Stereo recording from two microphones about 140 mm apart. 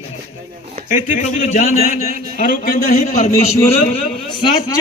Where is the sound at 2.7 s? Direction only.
65° left (ahead or behind).